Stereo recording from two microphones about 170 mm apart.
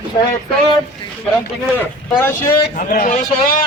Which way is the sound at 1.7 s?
15° left (ahead or behind).